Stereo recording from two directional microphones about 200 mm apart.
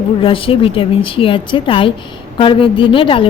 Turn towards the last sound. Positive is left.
turn(degrees=25)  # may be behind; listen again after turning